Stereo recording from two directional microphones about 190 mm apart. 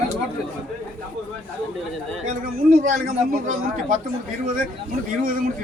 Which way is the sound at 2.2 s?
45° right (ahead or behind).